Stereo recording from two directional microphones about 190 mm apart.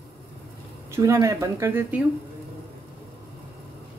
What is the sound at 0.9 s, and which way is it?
Speech, 15° right (ahead or behind).